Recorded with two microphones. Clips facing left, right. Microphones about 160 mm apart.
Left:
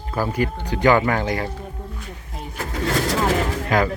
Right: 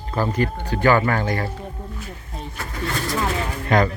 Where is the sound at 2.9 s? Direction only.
85° left.